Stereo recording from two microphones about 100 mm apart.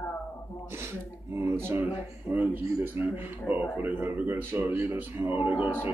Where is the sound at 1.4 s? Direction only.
25° right (ahead or behind).